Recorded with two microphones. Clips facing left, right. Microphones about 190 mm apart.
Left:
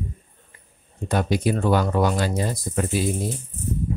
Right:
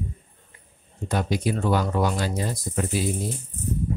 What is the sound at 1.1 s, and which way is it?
Speech, 60° left (ahead or behind).